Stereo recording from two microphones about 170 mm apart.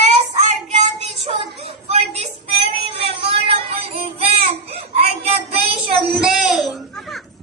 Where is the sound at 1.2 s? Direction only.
35° right (ahead or behind).